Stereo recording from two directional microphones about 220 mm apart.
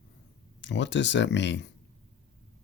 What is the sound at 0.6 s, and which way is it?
Speech, 55° left (ahead or behind).